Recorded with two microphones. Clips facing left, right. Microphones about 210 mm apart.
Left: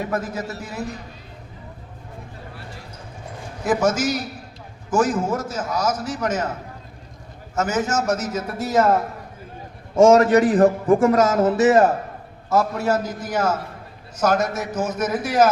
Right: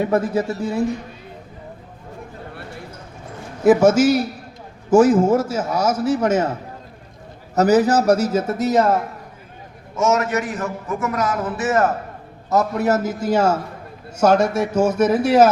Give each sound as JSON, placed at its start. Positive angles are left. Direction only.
{"t": 0.0, "sound": "a man's voice", "side_deg": -30}
{"t": 4.9, "sound": "a man's voice", "side_deg": -30}
{"t": 7.5, "sound": "a man's voice", "side_deg": -35}
{"t": 10.0, "sound": "a man's voice", "side_deg": 35}
{"t": 12.5, "sound": "a man's voice", "side_deg": -20}